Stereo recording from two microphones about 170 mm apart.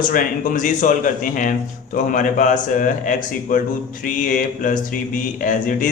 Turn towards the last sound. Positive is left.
turn(degrees=50)  # may be behind; listen again after turning